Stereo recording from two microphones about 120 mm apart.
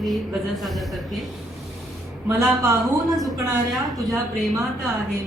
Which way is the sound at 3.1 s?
Centre (ahead or behind).